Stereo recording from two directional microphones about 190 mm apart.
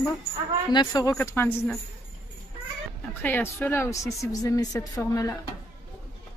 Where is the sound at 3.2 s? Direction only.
10° left (ahead or behind).